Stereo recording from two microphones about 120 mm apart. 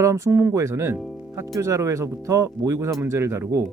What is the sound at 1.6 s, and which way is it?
Speech, 25° right (ahead or behind).